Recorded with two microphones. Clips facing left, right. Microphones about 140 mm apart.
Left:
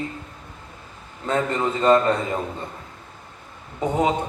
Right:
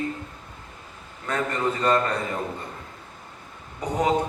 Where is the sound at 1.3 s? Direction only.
25° left (ahead or behind).